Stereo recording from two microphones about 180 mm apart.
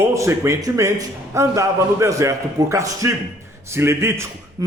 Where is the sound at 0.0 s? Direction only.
15° right (ahead or behind).